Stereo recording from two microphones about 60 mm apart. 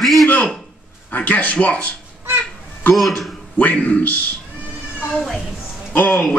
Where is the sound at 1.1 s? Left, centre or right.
Left.